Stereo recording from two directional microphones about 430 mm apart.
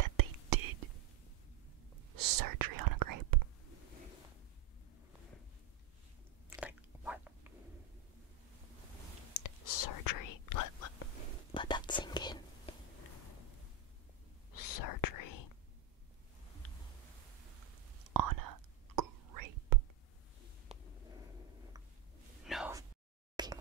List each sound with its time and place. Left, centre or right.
0.0 s whispering: right
2.1 s whispering: right
6.6 s a sound: centre
9.3 s whispering: left
11.5 s whispering: centre
14.5 s whispering: left
18.1 s whispering: right
22.4 s whispering: centre
23.3 s a sound: centre